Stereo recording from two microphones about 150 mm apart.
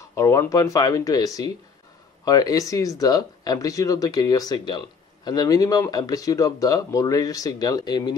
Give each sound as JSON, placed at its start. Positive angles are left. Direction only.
{"t": 0.1, "sound": "speech", "side_deg": 20}